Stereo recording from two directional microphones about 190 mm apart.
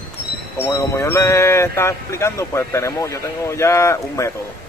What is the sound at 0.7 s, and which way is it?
Speech, 15° left (ahead or behind).